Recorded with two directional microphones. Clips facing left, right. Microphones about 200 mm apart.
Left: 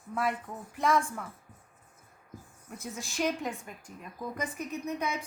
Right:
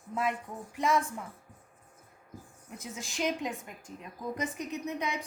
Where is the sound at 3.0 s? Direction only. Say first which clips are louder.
Left 1 dB; 20° right (ahead or behind).